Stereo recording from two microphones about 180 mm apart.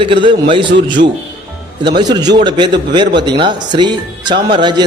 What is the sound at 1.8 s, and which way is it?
A man's voice, 25° right (ahead or behind).